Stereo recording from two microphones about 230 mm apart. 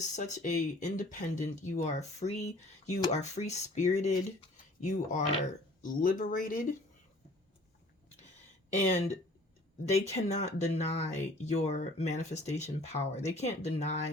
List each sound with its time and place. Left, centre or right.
0.2 s speech: left
8.7 s speech: left